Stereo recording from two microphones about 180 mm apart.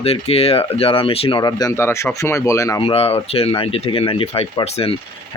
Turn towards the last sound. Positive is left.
turn(degrees=35)  # may be behind; listen again after turning